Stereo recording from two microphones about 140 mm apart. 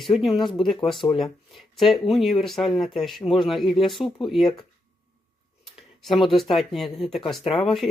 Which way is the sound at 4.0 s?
40° left (ahead or behind).